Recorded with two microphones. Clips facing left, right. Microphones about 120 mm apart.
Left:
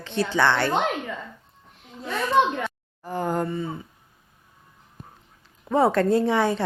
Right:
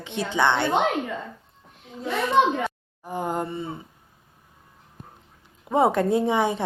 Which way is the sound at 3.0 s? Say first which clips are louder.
Left 2 dB; 15° right (ahead or behind).